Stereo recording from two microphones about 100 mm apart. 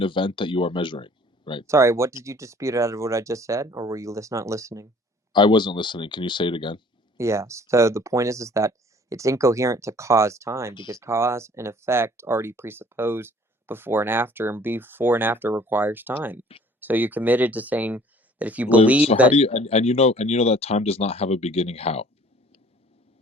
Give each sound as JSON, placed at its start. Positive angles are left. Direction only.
{"t": 0.0, "sound": "speech", "side_deg": 55}
{"t": 1.6, "sound": "speech", "side_deg": -30}
{"t": 5.3, "sound": "speech", "side_deg": 50}
{"t": 7.2, "sound": "speech", "side_deg": -30}
{"t": 19.3, "sound": "speech", "side_deg": 90}